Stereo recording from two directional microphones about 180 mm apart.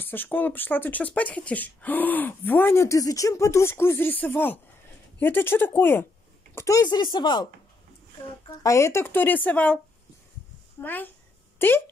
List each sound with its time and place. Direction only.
0.0 s speech: 10° left (ahead or behind)
8.6 s speech: 15° left (ahead or behind)
10.8 s speech: 10° left (ahead or behind)
11.5 s a sound: 10° left (ahead or behind)